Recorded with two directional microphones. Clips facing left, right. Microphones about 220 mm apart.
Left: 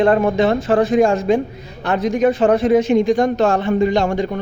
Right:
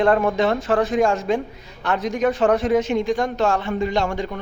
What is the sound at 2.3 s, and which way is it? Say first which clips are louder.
Speech: left 3 dB; 25° left (ahead or behind).